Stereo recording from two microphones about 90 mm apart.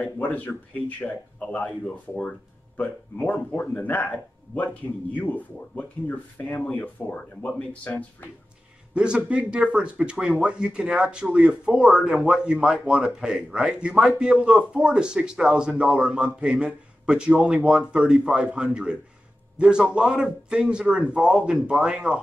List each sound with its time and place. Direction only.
0.0 s speech: 20° left (ahead or behind)
2.8 s speech: 15° left (ahead or behind)
8.9 s speech: 10° right (ahead or behind)